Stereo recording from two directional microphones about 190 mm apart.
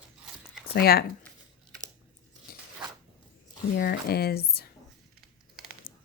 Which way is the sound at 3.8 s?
55° left (ahead or behind).